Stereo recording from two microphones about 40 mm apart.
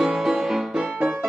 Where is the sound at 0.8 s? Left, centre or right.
Right.